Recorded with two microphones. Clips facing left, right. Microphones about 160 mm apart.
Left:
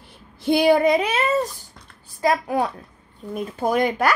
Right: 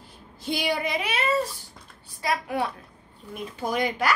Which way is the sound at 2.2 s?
40° left (ahead or behind).